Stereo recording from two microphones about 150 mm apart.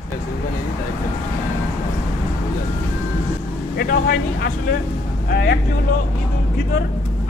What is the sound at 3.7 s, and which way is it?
Speech, 80° left.